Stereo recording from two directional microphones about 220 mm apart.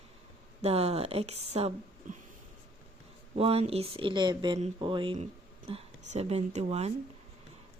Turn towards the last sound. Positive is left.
turn(degrees=-30)  # may be behind; listen again after turning